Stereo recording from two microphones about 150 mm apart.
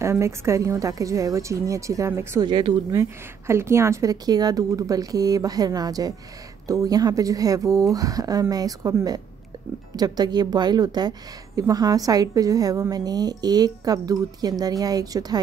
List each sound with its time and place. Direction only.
0.0 s a woman's voice: 20° right (ahead or behind)
2.4 s speech: 30° right (ahead or behind)
2.9 s a woman's voice: 20° right (ahead or behind)